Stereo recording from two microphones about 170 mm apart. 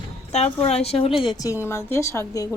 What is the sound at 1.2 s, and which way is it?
Speech, 25° left (ahead or behind).